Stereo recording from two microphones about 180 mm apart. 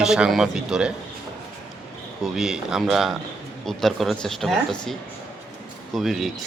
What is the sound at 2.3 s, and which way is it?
Speech, 5° right (ahead or behind).